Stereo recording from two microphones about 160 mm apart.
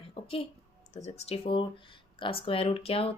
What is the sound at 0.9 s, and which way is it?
A woman's voice, 45° left (ahead or behind).